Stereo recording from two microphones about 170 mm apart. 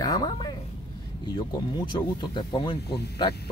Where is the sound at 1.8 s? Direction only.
25° left (ahead or behind).